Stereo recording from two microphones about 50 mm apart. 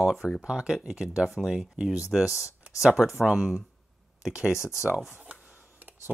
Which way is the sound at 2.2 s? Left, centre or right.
Left.